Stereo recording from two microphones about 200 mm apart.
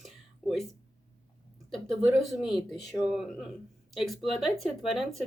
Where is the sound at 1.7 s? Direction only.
Centre (ahead or behind).